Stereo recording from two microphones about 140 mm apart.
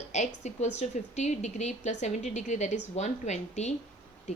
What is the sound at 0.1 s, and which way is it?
A woman's voice, 55° left (ahead or behind).